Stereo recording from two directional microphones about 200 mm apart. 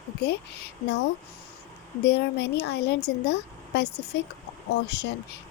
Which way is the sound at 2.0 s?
60° left (ahead or behind).